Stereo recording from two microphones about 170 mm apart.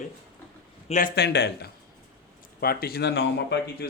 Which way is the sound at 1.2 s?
80° left.